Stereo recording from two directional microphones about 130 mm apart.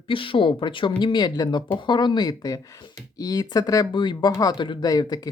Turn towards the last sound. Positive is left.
turn(degrees=30)  # may be behind; listen again after turning